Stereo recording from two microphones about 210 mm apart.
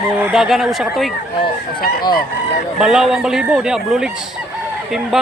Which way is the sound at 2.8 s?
Centre (ahead or behind).